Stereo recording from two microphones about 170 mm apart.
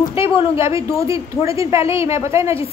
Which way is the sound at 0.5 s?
15° right (ahead or behind).